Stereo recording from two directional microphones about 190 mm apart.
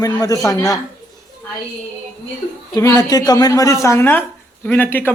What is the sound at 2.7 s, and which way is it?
Speech, 15° left (ahead or behind).